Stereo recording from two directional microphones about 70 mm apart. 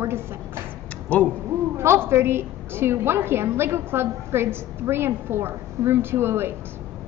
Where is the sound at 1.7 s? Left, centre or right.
Right.